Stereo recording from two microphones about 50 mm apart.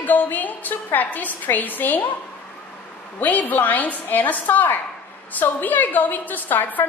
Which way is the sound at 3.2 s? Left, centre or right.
Left.